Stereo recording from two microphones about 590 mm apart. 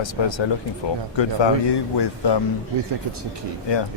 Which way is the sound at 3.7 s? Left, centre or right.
Left.